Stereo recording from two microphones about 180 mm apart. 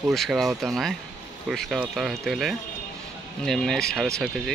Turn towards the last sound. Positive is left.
turn(degrees=0)  # may be behind; listen again after turning